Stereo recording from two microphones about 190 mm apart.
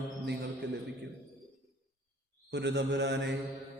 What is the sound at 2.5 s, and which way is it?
Speech, 65° right (ahead or behind).